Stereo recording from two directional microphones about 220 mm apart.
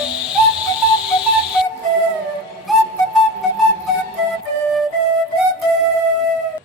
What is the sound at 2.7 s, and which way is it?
Music, centre (ahead or behind).